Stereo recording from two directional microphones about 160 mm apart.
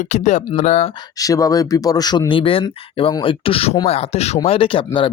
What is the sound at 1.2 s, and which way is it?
Speech, 20° left (ahead or behind).